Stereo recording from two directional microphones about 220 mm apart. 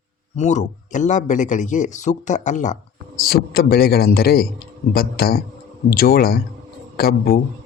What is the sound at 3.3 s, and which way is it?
A man's voice, 45° left (ahead or behind).